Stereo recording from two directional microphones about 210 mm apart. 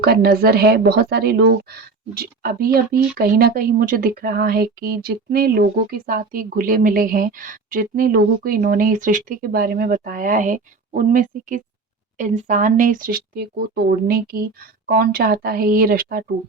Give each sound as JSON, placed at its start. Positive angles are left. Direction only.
{"t": 0.0, "sound": "a woman's voice", "side_deg": -50}